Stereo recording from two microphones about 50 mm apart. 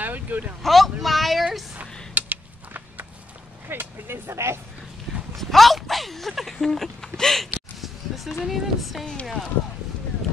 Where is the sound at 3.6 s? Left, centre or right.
Right.